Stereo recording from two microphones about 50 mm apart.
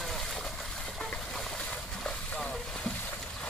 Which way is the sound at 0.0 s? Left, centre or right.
Centre.